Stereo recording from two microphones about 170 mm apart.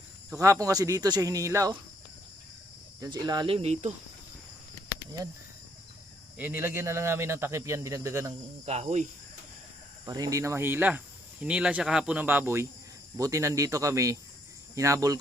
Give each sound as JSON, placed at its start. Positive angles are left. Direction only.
{"t": 0.3, "sound": "speech", "side_deg": -20}
{"t": 3.0, "sound": "speech", "side_deg": -20}
{"t": 6.3, "sound": "speech", "side_deg": -10}
{"t": 8.6, "sound": "speech", "side_deg": -40}
{"t": 10.1, "sound": "speech", "side_deg": -20}